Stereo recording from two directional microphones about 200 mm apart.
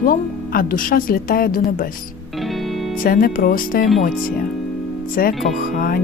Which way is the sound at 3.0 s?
45° left (ahead or behind).